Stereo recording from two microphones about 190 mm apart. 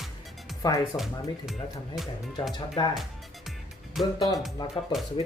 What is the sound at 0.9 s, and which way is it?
Speech, 20° left (ahead or behind).